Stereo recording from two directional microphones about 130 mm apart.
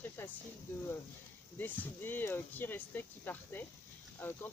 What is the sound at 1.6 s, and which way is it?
Speech, 15° left (ahead or behind).